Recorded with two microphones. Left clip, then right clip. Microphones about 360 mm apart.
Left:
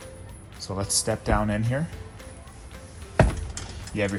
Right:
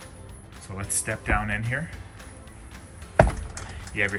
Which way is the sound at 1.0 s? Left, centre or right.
Centre.